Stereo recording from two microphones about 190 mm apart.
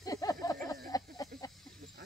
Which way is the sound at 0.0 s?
15° left (ahead or behind).